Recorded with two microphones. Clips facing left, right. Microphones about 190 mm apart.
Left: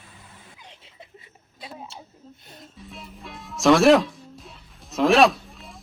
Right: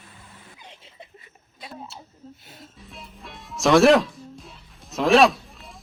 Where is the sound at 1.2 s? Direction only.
25° left (ahead or behind).